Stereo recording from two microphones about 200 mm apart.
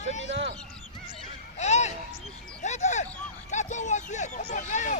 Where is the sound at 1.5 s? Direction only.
35° left (ahead or behind).